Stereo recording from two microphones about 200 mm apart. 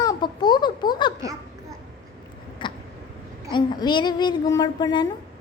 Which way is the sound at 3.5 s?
20° left (ahead or behind).